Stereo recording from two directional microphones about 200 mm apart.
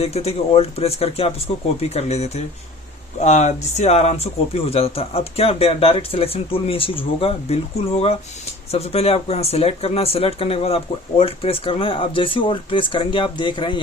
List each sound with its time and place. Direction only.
0.0 s speech: 30° left (ahead or behind)